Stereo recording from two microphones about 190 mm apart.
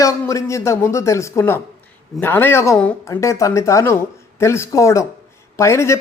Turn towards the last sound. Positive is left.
turn(degrees=15)  # may be behind; listen again after turning